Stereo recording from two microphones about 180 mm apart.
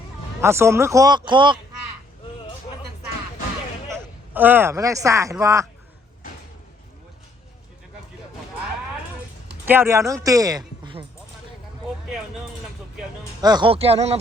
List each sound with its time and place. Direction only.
0.4 s speech: 15° right (ahead or behind)
3.8 s speech: 10° right (ahead or behind)
9.6 s speech: 15° right (ahead or behind)
13.4 s speech: 25° right (ahead or behind)